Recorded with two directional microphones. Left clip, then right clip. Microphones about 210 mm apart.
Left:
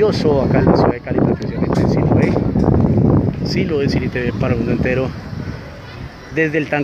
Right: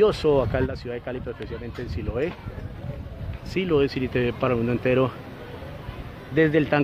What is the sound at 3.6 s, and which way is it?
Speech, 15° right (ahead or behind).